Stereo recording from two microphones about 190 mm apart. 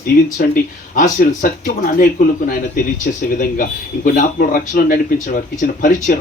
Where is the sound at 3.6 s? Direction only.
45° left (ahead or behind).